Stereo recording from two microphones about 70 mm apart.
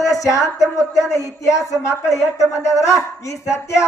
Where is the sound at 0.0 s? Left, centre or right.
Left.